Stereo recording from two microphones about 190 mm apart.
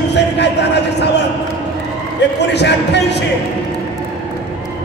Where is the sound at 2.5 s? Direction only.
65° left (ahead or behind).